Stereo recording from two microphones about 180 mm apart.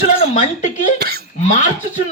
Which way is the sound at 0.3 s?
45° left (ahead or behind).